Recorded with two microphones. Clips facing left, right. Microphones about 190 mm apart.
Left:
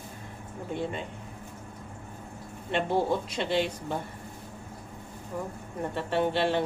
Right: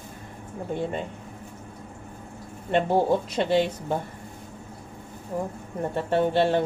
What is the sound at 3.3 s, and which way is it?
Speech, 45° right (ahead or behind).